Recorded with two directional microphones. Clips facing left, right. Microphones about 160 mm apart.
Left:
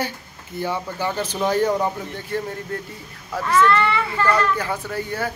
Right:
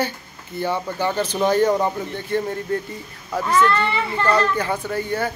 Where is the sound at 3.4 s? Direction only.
20° right (ahead or behind).